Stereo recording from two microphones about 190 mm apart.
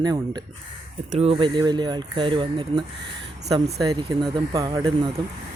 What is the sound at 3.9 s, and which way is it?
Speech, 20° right (ahead or behind).